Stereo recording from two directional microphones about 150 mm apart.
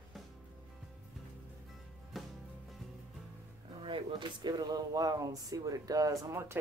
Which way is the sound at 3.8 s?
35° right (ahead or behind).